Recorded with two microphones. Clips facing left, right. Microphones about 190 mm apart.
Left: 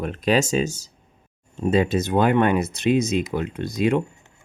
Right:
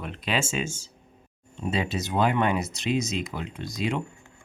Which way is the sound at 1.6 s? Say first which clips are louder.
Left 8 dB; 50° left (ahead or behind).